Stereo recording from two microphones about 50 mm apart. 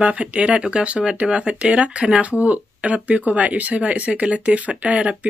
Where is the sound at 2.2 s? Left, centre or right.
Right.